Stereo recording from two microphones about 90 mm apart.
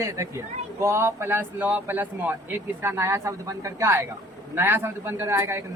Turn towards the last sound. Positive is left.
turn(degrees=-30)  # may be behind; listen again after turning